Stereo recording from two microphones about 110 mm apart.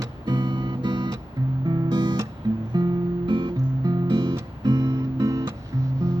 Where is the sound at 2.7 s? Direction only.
40° right (ahead or behind).